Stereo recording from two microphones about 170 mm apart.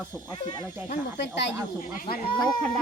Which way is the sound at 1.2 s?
90° left.